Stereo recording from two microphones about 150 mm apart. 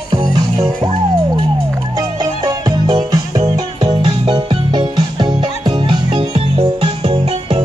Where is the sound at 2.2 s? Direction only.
25° right (ahead or behind).